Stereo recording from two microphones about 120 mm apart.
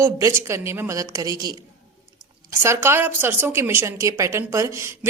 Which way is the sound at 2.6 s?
20° right (ahead or behind).